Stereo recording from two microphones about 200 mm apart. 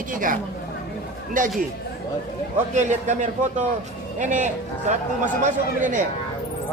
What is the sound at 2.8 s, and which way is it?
Speech, 35° right (ahead or behind).